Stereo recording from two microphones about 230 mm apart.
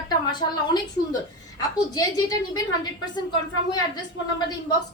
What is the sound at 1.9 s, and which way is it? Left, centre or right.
Speech, centre.